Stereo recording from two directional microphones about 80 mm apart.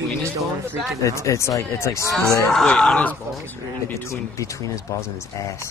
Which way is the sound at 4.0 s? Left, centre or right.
Left.